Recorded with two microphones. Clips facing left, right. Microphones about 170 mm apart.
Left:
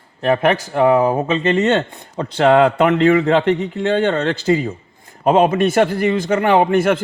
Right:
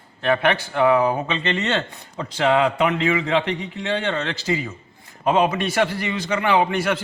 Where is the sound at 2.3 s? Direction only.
55° left (ahead or behind).